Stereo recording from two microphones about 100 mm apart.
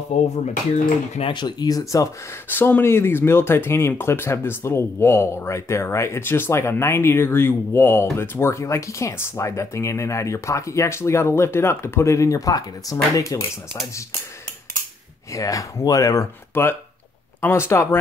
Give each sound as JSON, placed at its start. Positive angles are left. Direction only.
{"t": 1.2, "sound": "speech", "side_deg": 50}
{"t": 2.5, "sound": "speech", "side_deg": 20}
{"t": 15.3, "sound": "speech", "side_deg": 35}